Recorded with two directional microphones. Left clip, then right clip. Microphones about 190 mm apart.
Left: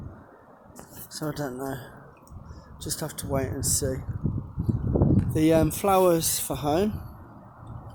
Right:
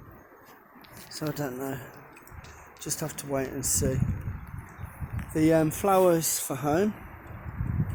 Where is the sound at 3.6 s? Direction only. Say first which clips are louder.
Left 1 dB; 60° left (ahead or behind).